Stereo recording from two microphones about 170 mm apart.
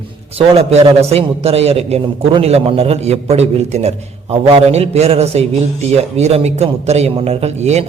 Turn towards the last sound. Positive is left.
turn(degrees=-40)  # may be behind; listen again after turning